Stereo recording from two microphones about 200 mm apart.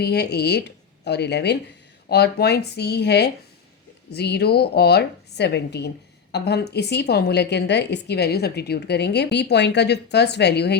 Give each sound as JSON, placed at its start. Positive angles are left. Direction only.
{"t": 0.0, "sound": "a woman's voice", "side_deg": 55}